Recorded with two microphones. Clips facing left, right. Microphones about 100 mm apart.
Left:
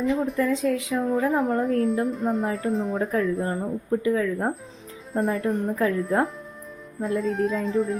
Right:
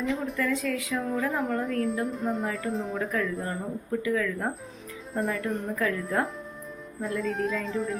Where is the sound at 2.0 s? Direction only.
Centre (ahead or behind).